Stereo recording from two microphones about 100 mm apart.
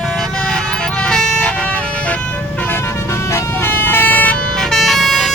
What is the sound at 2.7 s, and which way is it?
Vehicle, 25° left (ahead or behind).